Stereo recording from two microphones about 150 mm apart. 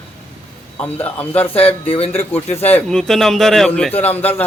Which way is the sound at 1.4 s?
40° left (ahead or behind).